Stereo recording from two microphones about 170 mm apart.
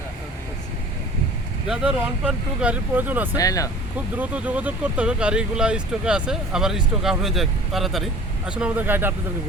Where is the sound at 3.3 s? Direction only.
20° left (ahead or behind).